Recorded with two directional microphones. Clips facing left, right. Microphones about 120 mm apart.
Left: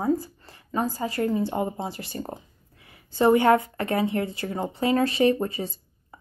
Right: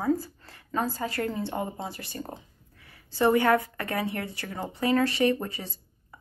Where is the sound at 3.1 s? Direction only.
20° left (ahead or behind).